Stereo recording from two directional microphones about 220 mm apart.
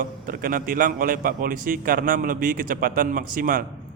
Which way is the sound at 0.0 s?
40° right (ahead or behind).